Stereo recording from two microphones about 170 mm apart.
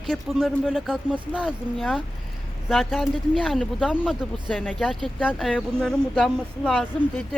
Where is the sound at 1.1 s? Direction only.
5° right (ahead or behind).